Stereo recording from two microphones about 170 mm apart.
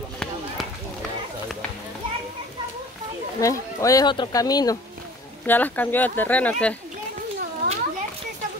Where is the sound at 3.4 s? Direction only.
20° left (ahead or behind).